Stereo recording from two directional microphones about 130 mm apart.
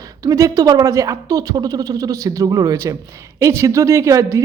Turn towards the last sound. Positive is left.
turn(degrees=-25)  # may be behind; listen again after turning